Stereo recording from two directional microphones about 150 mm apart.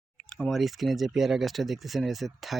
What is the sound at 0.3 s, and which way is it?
Speech, centre (ahead or behind).